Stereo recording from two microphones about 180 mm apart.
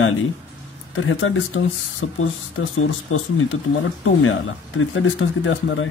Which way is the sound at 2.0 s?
90° left.